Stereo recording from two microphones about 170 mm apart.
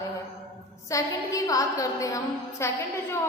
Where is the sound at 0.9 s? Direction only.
20° left (ahead or behind).